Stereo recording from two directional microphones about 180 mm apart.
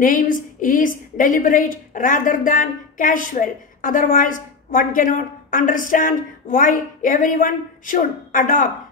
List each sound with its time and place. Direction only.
0.0 s a woman's voice: 50° left (ahead or behind)